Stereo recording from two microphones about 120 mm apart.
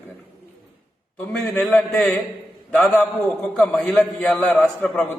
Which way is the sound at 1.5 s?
10° left (ahead or behind).